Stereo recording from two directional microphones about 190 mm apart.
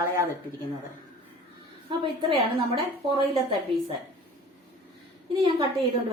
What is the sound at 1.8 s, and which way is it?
A woman's voice, 25° right (ahead or behind).